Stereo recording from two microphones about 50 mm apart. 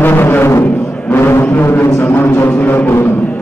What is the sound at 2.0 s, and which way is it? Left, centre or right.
Music, left.